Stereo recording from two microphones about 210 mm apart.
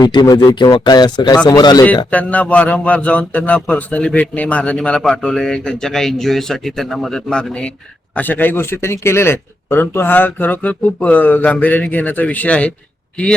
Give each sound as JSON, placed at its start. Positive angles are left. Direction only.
{"t": 0.0, "sound": "speech", "side_deg": 20}
{"t": 2.0, "sound": "a man's voice", "side_deg": 5}